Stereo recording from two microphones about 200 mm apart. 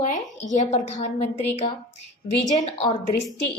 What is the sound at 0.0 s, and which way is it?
A woman's voice, 40° left (ahead or behind).